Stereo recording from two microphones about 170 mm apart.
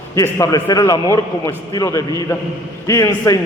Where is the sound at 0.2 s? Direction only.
20° left (ahead or behind).